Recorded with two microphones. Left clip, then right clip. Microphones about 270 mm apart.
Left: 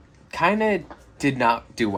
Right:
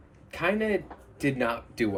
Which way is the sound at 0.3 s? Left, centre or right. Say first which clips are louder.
Left 6 dB; centre.